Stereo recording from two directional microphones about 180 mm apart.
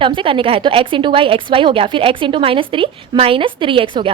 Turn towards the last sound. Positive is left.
turn(degrees=-30)  # may be behind; listen again after turning